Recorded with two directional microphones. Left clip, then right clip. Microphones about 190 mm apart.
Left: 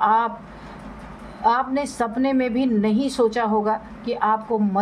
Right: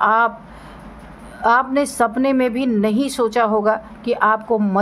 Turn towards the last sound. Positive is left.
turn(degrees=-35)  # may be behind; listen again after turning